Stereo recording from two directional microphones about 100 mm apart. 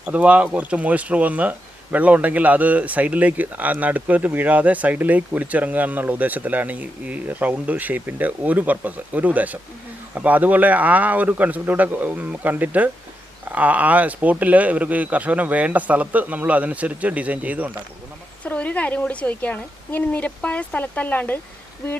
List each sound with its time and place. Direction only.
0.1 s speech: 15° right (ahead or behind)
18.4 s a woman's voice: 15° left (ahead or behind)